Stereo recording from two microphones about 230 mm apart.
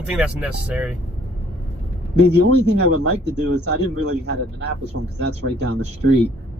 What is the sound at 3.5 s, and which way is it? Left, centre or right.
A man's voice, right.